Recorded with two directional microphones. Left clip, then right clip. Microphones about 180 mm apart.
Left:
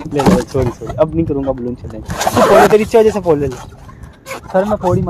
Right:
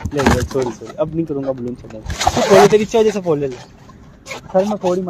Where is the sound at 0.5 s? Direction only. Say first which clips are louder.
Left 4 dB; 35° left (ahead or behind).